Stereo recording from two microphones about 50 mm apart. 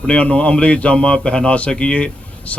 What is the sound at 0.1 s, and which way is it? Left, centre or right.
Speech, left.